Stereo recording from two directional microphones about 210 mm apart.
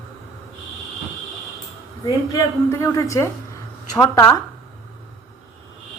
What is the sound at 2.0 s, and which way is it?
A woman's voice, 20° left (ahead or behind).